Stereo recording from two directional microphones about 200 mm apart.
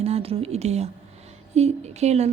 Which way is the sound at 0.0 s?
30° right (ahead or behind).